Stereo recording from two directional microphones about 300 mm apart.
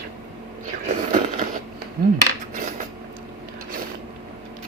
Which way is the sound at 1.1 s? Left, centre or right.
Right.